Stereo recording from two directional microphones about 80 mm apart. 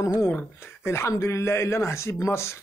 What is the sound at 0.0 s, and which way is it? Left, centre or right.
Speech, left.